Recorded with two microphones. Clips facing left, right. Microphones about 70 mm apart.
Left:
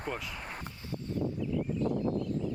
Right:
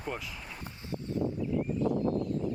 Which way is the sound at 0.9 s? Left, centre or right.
Right.